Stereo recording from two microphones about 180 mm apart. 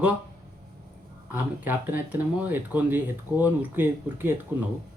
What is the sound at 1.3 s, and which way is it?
Speech, 10° right (ahead or behind).